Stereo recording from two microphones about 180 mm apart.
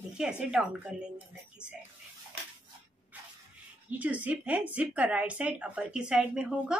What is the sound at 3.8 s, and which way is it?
Speech, 10° right (ahead or behind).